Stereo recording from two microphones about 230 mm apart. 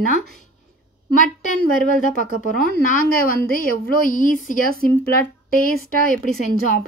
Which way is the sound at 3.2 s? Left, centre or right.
Left.